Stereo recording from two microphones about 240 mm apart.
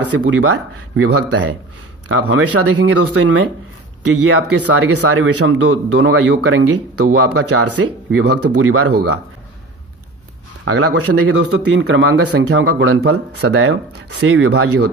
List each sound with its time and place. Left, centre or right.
0.3 s speech: right
2.0 s speech: right
10.6 s a man's voice: right
11.2 s speech: right
13.5 s speech: right
13.9 s speech: right